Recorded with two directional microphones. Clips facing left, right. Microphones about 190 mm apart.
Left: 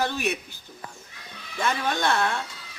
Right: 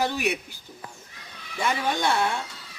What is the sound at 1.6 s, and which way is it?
Speech, 15° right (ahead or behind).